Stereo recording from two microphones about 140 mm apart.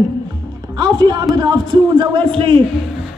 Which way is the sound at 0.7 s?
30° right (ahead or behind).